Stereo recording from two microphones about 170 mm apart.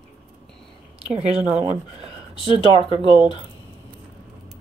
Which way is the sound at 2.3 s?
30° left (ahead or behind).